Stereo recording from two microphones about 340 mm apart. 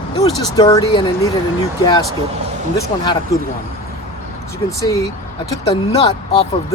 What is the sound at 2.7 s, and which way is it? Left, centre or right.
Speech, centre.